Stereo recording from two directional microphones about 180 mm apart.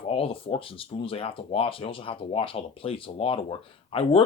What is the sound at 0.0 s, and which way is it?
Speech, 30° left (ahead or behind).